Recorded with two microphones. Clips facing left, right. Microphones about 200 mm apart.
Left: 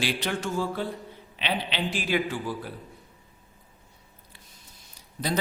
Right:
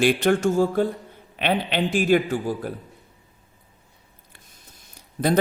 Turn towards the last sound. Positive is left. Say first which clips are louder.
# right 8 dB
turn(degrees=-50)  # may be behind; listen again after turning